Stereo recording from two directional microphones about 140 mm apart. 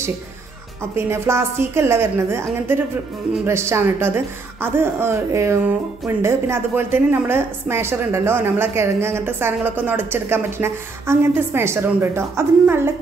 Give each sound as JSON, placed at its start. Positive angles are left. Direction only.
{"t": 0.9, "sound": "a woman's voice", "side_deg": -20}